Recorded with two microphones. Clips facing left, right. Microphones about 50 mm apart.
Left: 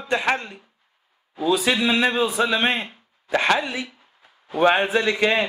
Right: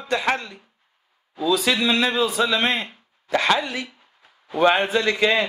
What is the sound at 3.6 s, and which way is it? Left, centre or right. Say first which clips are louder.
Speech: even; right.